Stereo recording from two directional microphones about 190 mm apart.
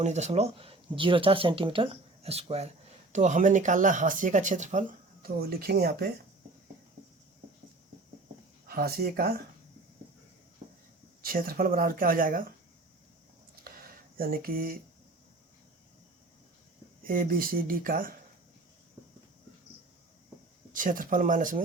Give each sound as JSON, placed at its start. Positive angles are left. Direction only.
{"t": 0.0, "sound": "speech", "side_deg": -35}
{"t": 8.6, "sound": "speech", "side_deg": -55}
{"t": 11.3, "sound": "speech", "side_deg": -50}
{"t": 13.7, "sound": "a sound", "side_deg": -50}
{"t": 17.1, "sound": "speech", "side_deg": -50}
{"t": 20.7, "sound": "speech", "side_deg": -45}